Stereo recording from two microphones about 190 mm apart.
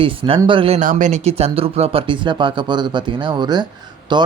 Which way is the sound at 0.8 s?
45° right (ahead or behind).